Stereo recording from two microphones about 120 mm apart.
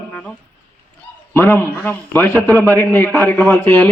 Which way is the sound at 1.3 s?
20° left (ahead or behind).